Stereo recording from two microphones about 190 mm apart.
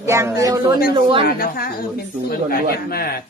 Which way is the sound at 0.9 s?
25° right (ahead or behind).